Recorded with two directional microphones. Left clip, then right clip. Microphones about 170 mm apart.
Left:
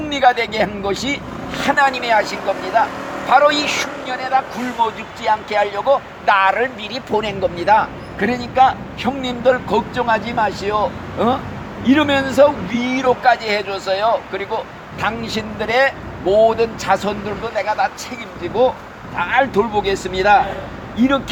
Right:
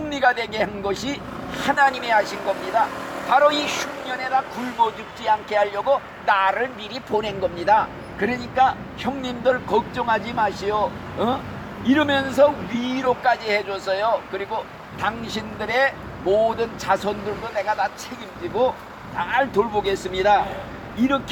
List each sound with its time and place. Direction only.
0.1 s speech: 35° left (ahead or behind)
19.1 s speech: 35° left (ahead or behind)